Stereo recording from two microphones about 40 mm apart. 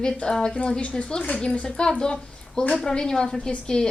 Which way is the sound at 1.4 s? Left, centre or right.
Left.